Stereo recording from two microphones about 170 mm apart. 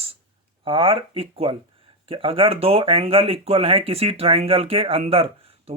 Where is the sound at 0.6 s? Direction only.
30° right (ahead or behind).